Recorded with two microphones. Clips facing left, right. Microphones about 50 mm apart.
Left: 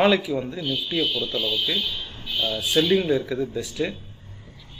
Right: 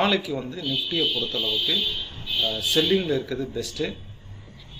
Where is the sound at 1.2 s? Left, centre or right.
Left.